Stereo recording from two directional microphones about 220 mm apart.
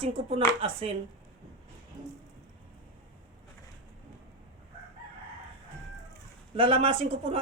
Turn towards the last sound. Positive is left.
turn(degrees=-25)  # may be behind; listen again after turning